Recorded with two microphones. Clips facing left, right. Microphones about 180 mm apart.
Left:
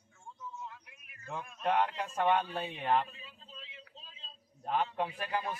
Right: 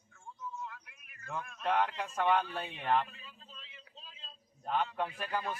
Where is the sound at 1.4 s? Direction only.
10° left (ahead or behind).